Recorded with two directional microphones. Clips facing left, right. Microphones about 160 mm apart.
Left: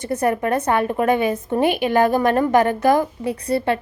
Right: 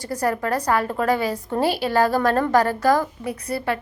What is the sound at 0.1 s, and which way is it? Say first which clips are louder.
Speech: left 3 dB; 25° left (ahead or behind).